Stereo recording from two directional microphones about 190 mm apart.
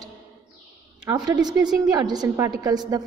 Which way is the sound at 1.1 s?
20° right (ahead or behind).